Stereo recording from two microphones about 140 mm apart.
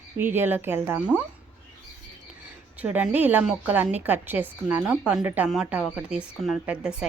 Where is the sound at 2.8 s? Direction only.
10° right (ahead or behind).